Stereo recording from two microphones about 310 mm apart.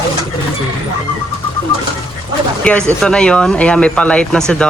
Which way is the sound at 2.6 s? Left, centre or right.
Centre.